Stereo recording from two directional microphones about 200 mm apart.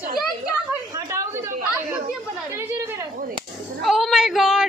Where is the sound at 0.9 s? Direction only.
15° right (ahead or behind).